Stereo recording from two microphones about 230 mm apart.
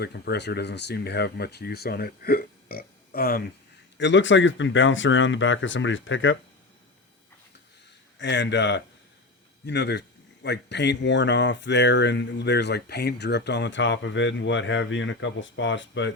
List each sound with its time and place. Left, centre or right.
0.0 s speech: left
8.2 s speech: left